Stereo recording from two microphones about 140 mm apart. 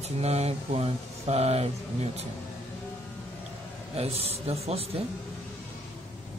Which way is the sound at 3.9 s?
45° right (ahead or behind).